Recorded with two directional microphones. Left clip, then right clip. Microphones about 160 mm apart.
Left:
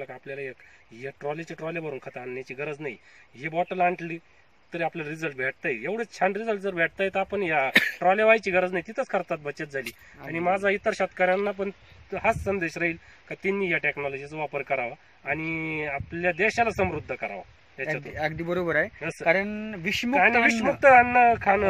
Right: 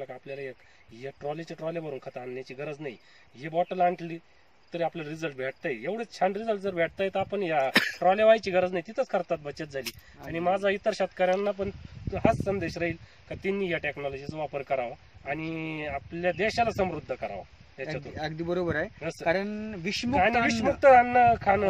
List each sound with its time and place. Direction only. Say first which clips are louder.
0.0 s speech: left 2 dB; 15° right (ahead or behind)
6.7 s speech: left 4 dB; 25° right (ahead or behind)
17.8 s speech: left 6 dB; 20° left (ahead or behind)
18.9 s speech: left 2 dB; 10° right (ahead or behind)
19.2 s speech: left 4 dB; 15° left (ahead or behind)
20.2 s speech: left 4 dB; 15° right (ahead or behind)
20.5 s speech: left 2 dB; 10° left (ahead or behind)
20.8 s speech: left 2 dB; 15° right (ahead or behind)